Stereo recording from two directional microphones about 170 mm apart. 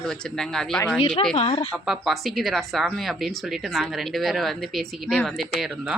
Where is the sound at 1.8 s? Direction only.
Centre (ahead or behind).